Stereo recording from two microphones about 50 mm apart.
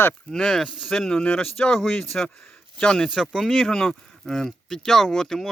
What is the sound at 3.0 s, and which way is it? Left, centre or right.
Speech, centre.